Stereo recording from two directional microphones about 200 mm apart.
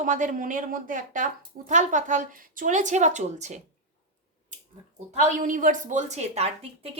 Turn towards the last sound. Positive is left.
turn(degrees=-30)  # may be behind; listen again after turning